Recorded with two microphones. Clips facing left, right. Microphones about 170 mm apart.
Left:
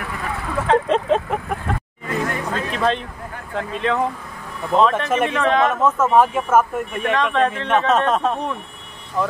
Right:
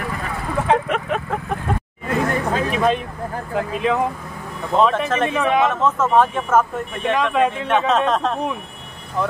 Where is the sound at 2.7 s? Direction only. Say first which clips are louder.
Even; 10° right (ahead or behind).